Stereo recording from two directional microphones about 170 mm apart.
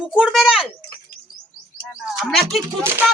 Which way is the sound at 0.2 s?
Centre (ahead or behind).